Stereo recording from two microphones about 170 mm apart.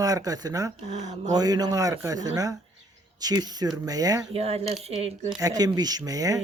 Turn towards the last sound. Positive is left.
turn(degrees=-20)  # may be behind; listen again after turning